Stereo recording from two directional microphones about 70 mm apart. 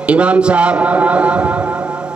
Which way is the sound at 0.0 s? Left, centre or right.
Centre.